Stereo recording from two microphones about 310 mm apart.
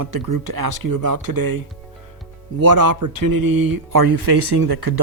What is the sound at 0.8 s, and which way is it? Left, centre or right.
Speech, right.